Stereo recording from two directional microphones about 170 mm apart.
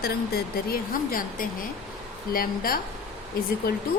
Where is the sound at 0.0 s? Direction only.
60° left (ahead or behind).